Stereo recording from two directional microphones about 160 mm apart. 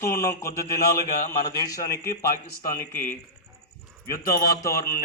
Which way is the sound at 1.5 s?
20° left (ahead or behind).